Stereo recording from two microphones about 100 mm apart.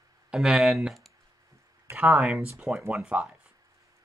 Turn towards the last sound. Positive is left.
turn(degrees=-10)  # may be behind; listen again after turning